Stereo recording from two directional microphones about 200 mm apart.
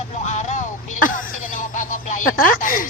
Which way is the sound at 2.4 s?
45° left (ahead or behind).